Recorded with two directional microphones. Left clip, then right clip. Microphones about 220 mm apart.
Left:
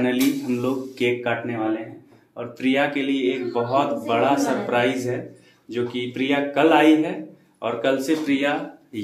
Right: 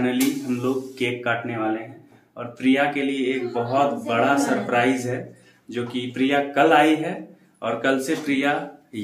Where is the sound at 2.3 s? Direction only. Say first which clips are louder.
Right 1 dB; 15° left (ahead or behind).